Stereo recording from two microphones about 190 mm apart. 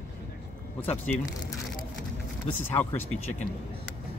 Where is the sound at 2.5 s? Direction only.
35° left (ahead or behind).